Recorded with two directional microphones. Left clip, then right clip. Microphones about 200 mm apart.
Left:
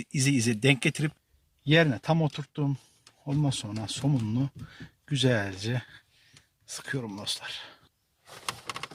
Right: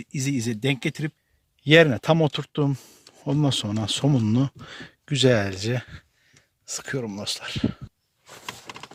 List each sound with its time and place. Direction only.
0.0 s speech: centre (ahead or behind)
1.6 s speech: 50° right (ahead or behind)